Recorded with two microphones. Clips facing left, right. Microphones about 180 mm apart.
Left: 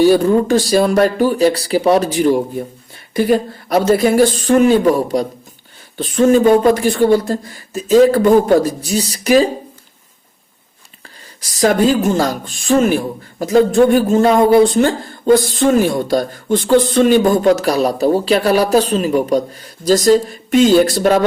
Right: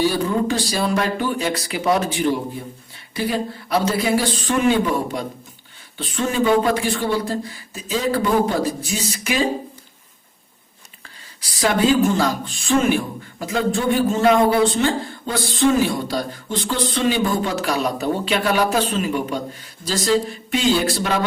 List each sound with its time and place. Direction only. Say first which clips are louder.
0.1 s speech: left 9 dB; 50° left (ahead or behind)
11.3 s speech: left 6 dB; 40° left (ahead or behind)